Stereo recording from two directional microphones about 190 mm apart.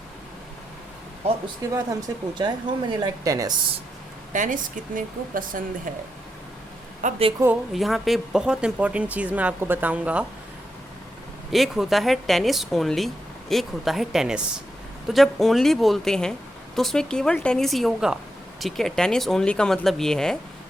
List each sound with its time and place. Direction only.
1.7 s speech: 20° right (ahead or behind)
4.3 s speech: 40° right (ahead or behind)
7.0 s speech: 30° right (ahead or behind)
7.3 s speech: 10° right (ahead or behind)
7.7 s speech: centre (ahead or behind)
11.5 s speech: centre (ahead or behind)